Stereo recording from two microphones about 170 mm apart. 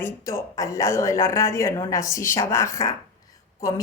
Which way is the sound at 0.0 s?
15° left (ahead or behind).